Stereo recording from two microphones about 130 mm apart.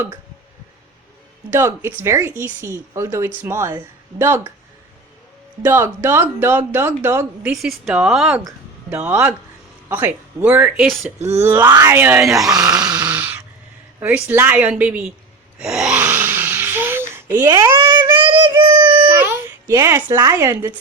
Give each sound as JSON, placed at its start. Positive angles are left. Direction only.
{"t": 1.5, "sound": "speech", "side_deg": -20}
{"t": 5.6, "sound": "speech", "side_deg": -20}
{"t": 7.5, "sound": "speech", "side_deg": 0}
{"t": 8.9, "sound": "speech", "side_deg": -15}
{"t": 12.5, "sound": "a sound", "side_deg": -30}
{"t": 12.8, "sound": "a sound", "side_deg": -10}
{"t": 14.0, "sound": "speech", "side_deg": -15}
{"t": 15.5, "sound": "a sound", "side_deg": -5}
{"t": 17.7, "sound": "child singing", "side_deg": -35}
{"t": 19.8, "sound": "speech", "side_deg": -20}